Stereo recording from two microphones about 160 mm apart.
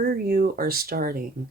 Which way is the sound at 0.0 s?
65° right (ahead or behind).